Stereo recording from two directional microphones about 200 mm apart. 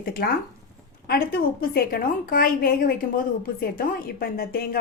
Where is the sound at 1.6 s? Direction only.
45° left (ahead or behind).